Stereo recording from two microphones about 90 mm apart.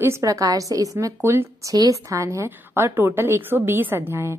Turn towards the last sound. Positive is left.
turn(degrees=-30)  # may be behind; listen again after turning